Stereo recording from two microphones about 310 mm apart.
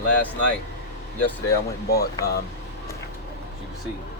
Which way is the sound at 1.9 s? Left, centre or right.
Left.